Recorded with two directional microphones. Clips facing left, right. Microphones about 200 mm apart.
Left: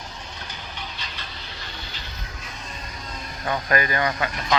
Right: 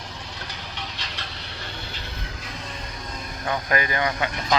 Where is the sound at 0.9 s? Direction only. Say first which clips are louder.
Right 1 dB; 75° right (ahead or behind).